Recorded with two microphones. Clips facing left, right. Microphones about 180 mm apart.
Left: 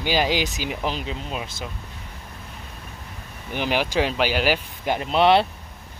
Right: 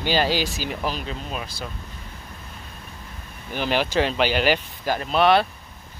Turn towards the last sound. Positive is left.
turn(degrees=25)  # may be behind; listen again after turning